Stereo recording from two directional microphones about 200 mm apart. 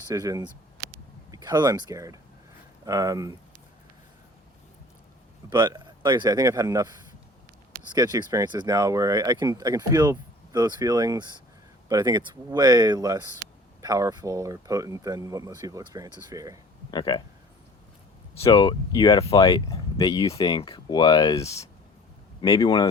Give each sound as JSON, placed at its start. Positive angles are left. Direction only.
{"t": 0.1, "sound": "speech", "side_deg": -15}
{"t": 5.5, "sound": "speech", "side_deg": -20}
{"t": 7.9, "sound": "speech", "side_deg": -15}
{"t": 16.9, "sound": "speech", "side_deg": 20}
{"t": 18.3, "sound": "speech", "side_deg": 30}